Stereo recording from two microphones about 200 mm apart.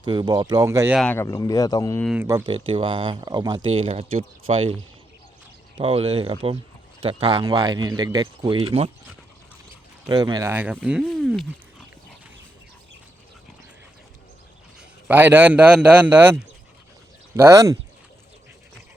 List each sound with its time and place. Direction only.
0.0 s speech: 20° right (ahead or behind)
0.9 s speech: 10° left (ahead or behind)
2.5 s speech: 25° right (ahead or behind)
10.1 s speech: 20° right (ahead or behind)
10.5 s speech: 10° right (ahead or behind)
14.8 s a man's voice: 5° right (ahead or behind)